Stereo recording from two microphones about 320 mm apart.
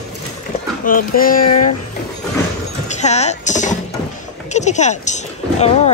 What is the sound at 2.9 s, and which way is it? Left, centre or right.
Speech, left.